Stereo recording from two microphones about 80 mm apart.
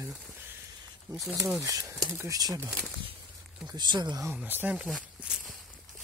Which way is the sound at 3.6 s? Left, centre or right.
Right.